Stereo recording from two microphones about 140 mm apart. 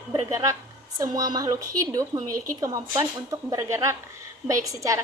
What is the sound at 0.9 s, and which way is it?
A woman's voice, 25° right (ahead or behind).